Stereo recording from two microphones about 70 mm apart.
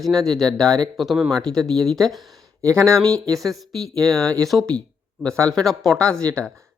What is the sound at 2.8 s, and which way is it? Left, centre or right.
Speech, right.